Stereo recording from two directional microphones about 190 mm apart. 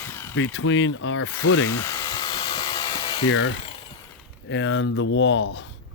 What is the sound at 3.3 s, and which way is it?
Speech, 90° left.